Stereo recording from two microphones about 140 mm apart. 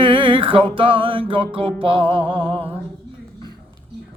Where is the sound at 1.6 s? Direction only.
40° right (ahead or behind).